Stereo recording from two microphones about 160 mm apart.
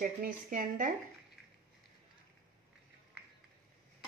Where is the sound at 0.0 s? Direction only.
60° right (ahead or behind).